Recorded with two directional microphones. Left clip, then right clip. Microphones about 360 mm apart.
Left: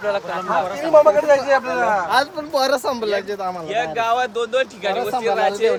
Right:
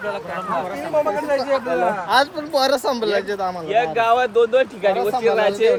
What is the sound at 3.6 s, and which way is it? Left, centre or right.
Speech, right.